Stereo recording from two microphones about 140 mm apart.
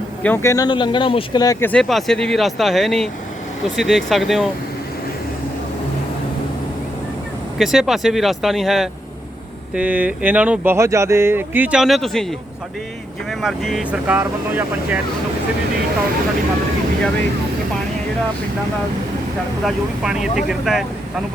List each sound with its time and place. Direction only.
0.2 s speech: 10° left (ahead or behind)
0.5 s speech: 30° left (ahead or behind)
1.6 s speech: 5° left (ahead or behind)
7.6 s speech: centre (ahead or behind)
13.4 s speech: centre (ahead or behind)
19.6 s speech: 5° right (ahead or behind)